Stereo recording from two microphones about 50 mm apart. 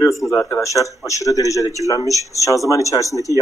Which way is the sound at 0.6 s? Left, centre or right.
Left.